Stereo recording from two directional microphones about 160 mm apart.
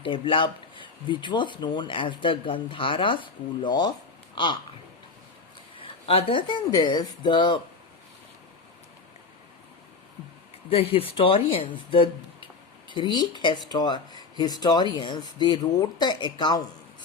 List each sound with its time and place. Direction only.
0.0 s speech: 30° left (ahead or behind)
5.8 s speech: 35° left (ahead or behind)
10.7 s speech: 35° left (ahead or behind)